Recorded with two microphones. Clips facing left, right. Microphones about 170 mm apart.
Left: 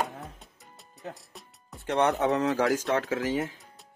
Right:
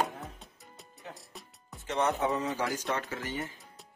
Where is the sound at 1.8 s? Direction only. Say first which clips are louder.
Left 5 dB; 65° left (ahead or behind).